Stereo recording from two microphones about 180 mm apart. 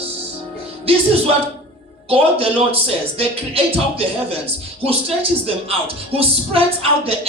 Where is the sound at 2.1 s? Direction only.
30° right (ahead or behind).